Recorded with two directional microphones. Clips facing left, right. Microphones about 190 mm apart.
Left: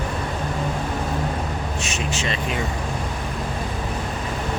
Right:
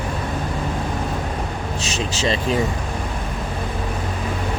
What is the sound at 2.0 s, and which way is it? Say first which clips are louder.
Speech: right 6 dB; 35° right (ahead or behind).